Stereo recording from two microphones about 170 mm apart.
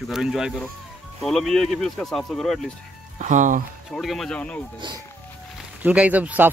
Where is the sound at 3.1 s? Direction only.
45° right (ahead or behind).